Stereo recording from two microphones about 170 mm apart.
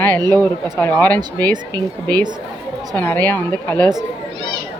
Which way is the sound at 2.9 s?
10° left (ahead or behind).